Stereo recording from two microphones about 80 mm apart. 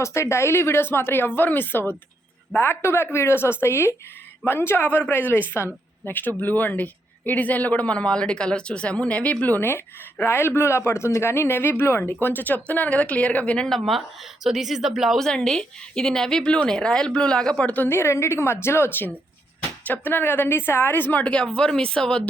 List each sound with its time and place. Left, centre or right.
0.0 s a woman's voice: left; by 15.3 s centre
15.3 s a woman's voice: centre
17.7 s a woman's voice: left; by 22.2 s centre